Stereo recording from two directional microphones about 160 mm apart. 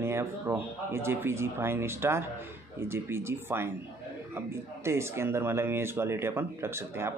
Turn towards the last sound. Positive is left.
turn(degrees=-15)  # may be behind; listen again after turning